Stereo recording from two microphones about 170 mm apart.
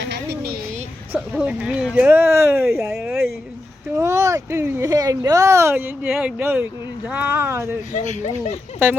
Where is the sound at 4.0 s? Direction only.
15° right (ahead or behind).